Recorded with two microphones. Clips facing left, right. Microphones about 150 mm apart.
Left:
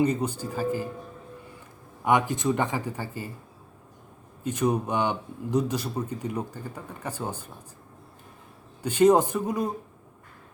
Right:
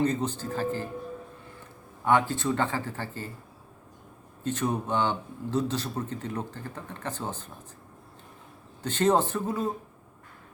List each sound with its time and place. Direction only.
0.0 s a man's voice: 10° left (ahead or behind)
2.0 s a man's voice: 15° left (ahead or behind)
4.4 s a man's voice: 15° left (ahead or behind)
8.8 s a man's voice: 10° left (ahead or behind)